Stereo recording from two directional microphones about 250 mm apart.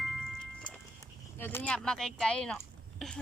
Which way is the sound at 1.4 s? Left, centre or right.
Centre.